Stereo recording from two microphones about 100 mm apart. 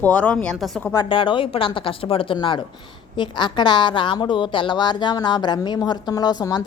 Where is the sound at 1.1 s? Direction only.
60° left (ahead or behind); by 6.6 s 40° left (ahead or behind).